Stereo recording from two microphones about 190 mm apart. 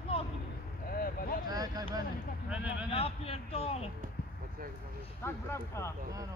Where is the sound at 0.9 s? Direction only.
50° left (ahead or behind).